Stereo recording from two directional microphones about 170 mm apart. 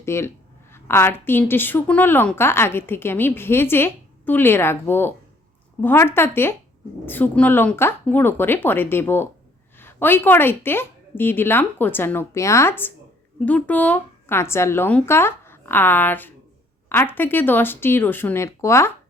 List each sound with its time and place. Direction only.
0.0 s a woman's voice: 15° left (ahead or behind)